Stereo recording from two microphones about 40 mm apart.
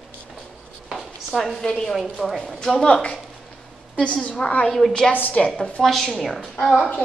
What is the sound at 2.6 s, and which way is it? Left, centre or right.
Speech, centre.